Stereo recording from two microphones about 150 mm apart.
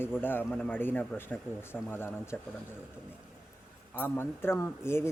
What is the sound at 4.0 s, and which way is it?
Speech, 15° left (ahead or behind).